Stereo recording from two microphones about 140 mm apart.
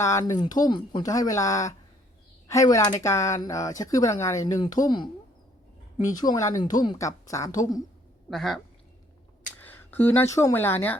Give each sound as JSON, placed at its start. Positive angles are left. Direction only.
{"t": 0.0, "sound": "speech", "side_deg": 20}
{"t": 8.3, "sound": "speech", "side_deg": 0}
{"t": 9.6, "sound": "speech", "side_deg": 15}